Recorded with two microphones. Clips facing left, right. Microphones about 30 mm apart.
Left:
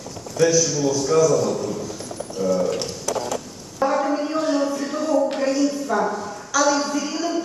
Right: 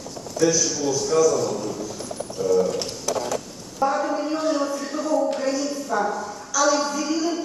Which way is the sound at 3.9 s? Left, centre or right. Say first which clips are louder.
Left 2 dB; centre.